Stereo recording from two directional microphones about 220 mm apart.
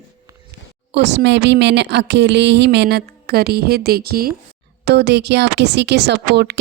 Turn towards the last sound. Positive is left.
turn(degrees=-50)  # may be behind; listen again after turning